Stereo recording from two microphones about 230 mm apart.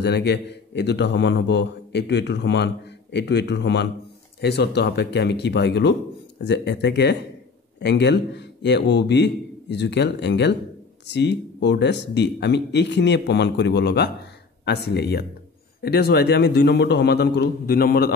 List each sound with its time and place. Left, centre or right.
0.0 s a man's voice: left